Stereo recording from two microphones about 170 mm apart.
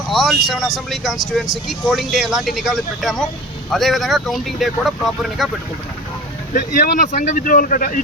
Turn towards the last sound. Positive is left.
turn(degrees=55)  # may be behind; listen again after turning